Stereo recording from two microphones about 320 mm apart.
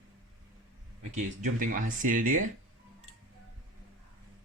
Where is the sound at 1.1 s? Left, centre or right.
Right.